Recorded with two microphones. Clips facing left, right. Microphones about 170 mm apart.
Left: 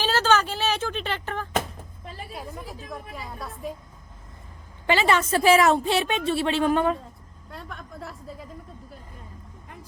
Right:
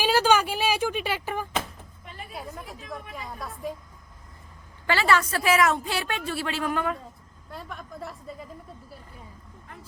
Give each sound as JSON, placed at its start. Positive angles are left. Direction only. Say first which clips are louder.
{"t": 0.0, "sound": "a sound", "louder": "right 1 dB", "side_deg": -10}
{"t": 2.3, "sound": "a woman's voice", "louder": "even", "side_deg": 0}
{"t": 4.9, "sound": "a woman's voice", "louder": "left 2 dB", "side_deg": 20}
{"t": 7.5, "sound": "a woman's voice", "louder": "right 1 dB", "side_deg": 0}